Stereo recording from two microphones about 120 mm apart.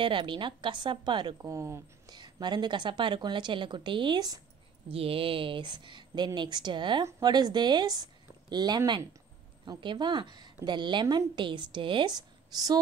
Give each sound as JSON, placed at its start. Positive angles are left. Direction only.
{"t": 0.0, "sound": "a woman's voice", "side_deg": -45}
{"t": 2.1, "sound": "a woman's voice", "side_deg": -35}
{"t": 4.8, "sound": "a woman's voice", "side_deg": -50}